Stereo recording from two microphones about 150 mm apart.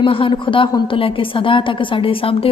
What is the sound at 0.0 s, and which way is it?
A woman's voice, 35° left (ahead or behind).